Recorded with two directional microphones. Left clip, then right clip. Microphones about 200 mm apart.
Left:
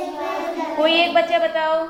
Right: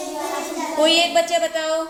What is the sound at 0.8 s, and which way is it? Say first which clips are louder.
Speech: even; 35° right (ahead or behind).